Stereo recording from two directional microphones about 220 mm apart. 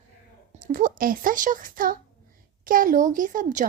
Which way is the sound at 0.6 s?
35° right (ahead or behind).